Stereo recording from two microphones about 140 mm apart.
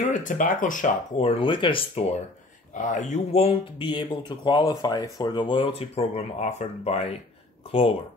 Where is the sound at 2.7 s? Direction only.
65° left (ahead or behind); by 3.5 s 50° left (ahead or behind).